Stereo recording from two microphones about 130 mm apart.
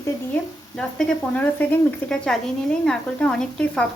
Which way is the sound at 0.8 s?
5° left (ahead or behind).